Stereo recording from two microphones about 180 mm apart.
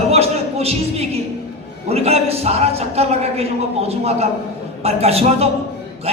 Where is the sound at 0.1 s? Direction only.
35° right (ahead or behind).